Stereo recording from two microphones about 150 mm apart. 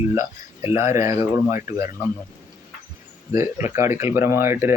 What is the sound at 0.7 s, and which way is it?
Speech, 20° right (ahead or behind).